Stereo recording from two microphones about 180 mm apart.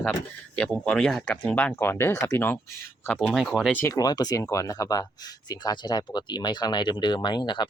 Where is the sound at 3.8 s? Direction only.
20° left (ahead or behind).